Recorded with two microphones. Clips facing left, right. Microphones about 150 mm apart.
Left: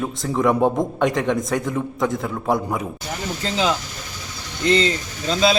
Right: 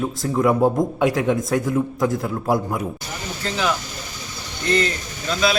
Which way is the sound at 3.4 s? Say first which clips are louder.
Left 1 dB; 20° left (ahead or behind).